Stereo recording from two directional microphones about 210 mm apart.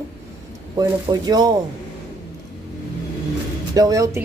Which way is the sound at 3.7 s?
15° right (ahead or behind).